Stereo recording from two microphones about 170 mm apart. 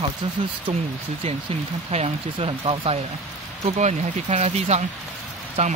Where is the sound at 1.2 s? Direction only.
35° right (ahead or behind).